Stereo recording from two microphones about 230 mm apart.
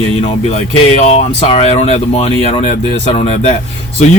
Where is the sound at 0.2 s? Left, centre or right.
Left.